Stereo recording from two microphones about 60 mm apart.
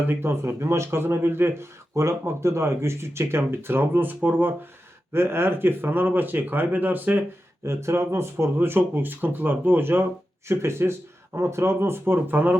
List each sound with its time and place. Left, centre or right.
0.1 s speech: right
5.1 s speech: right
7.6 s speech: right